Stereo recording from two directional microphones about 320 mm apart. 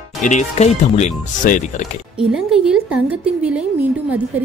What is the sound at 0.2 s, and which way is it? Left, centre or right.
Speech, left.